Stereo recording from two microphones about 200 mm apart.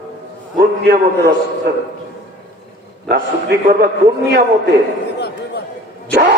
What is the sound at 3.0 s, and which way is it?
Speech, 55° right (ahead or behind).